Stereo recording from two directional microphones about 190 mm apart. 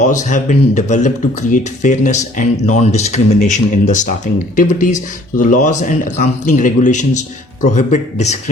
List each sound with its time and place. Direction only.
0.0 s speech: 40° left (ahead or behind)